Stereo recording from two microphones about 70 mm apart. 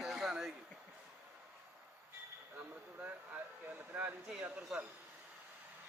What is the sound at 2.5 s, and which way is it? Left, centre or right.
Speech, right.